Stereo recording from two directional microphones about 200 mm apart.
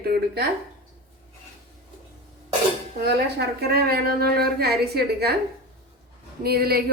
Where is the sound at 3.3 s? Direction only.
50° right (ahead or behind).